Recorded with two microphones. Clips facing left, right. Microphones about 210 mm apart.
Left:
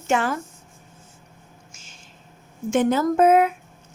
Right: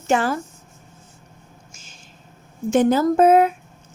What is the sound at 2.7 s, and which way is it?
Speech, 35° right (ahead or behind).